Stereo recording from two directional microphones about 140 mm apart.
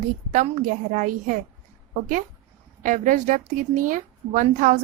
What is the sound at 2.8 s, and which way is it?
A woman's voice, 65° right (ahead or behind).